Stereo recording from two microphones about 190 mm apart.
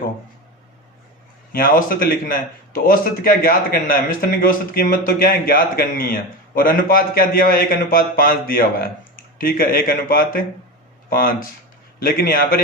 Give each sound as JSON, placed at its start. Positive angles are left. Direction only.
{"t": 1.5, "sound": "a man's voice", "side_deg": 50}
{"t": 12.0, "sound": "a man's voice", "side_deg": 50}